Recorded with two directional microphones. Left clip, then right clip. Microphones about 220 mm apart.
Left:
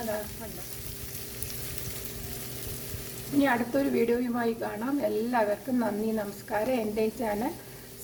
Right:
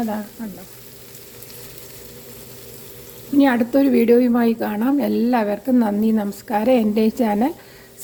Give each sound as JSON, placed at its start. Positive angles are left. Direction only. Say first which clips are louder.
{"t": 3.4, "sound": "speech", "louder": "right 9 dB", "side_deg": -40}